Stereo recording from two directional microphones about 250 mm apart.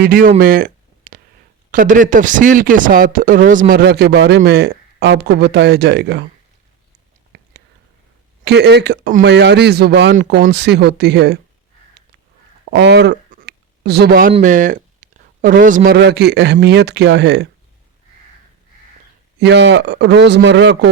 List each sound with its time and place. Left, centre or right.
0.0 s speech: right
7.3 s whispering: right
8.4 s speech: right
12.7 s a sound: right
14.3 s speech: right
19.4 s speech: right